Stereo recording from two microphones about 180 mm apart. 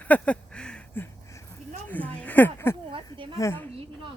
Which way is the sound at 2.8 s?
30° right (ahead or behind).